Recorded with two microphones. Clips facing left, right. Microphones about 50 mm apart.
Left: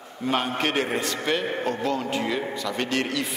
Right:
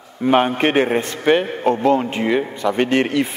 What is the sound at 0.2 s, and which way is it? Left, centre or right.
A man's voice, right.